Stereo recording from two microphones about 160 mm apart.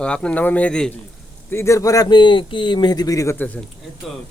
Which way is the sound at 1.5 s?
15° left (ahead or behind).